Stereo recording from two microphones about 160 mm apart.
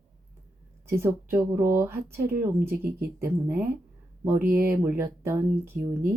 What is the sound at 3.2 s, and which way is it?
Speech, 15° right (ahead or behind).